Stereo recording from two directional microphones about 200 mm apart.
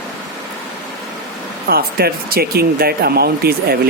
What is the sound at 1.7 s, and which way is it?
Speech, 50° right (ahead or behind).